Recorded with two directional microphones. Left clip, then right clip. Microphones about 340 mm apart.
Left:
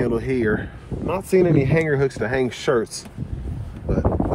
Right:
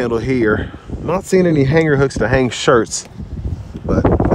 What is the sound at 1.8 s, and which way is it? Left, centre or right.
Speech, centre.